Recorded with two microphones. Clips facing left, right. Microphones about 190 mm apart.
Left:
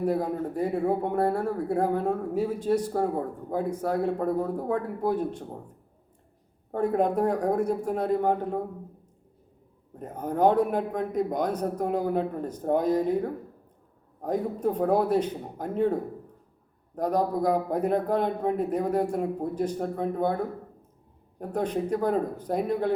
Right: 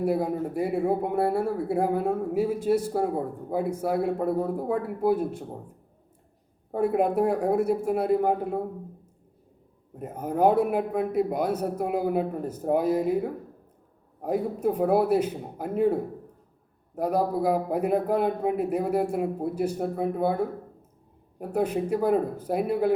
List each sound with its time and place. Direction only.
0.0 s a man's voice: 10° right (ahead or behind)
6.7 s a man's voice: 10° right (ahead or behind)
10.0 s a man's voice: 10° right (ahead or behind)